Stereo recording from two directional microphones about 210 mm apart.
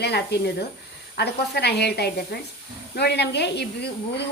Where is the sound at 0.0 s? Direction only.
50° left (ahead or behind).